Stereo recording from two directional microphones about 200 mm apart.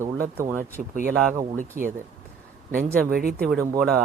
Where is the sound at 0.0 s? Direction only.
15° right (ahead or behind).